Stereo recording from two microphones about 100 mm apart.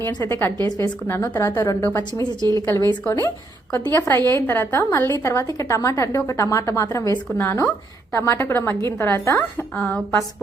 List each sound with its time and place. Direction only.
0.2 s a woman's voice: 20° left (ahead or behind)
2.4 s speech: 40° right (ahead or behind)
3.0 s a woman's voice: 25° left (ahead or behind)
9.7 s speech: 15° left (ahead or behind)